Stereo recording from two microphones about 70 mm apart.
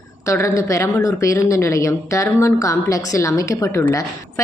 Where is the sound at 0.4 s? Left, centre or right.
Left.